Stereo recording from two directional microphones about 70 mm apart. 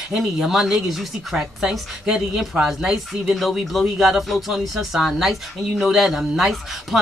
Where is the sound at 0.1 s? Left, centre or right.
Centre.